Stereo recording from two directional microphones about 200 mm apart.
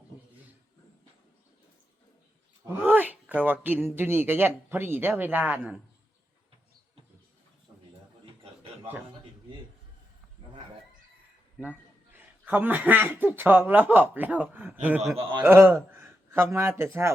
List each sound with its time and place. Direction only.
2.6 s a man's voice: 10° right (ahead or behind)
11.6 s a man's voice: 10° right (ahead or behind)
15.2 s a man's voice: 25° right (ahead or behind)
15.4 s speech: 10° right (ahead or behind)